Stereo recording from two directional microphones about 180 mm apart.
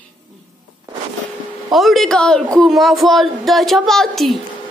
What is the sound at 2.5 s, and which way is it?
A woman's voice, centre (ahead or behind).